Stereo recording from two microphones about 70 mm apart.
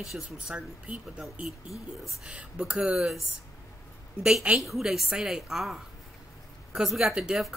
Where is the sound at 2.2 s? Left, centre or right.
Centre.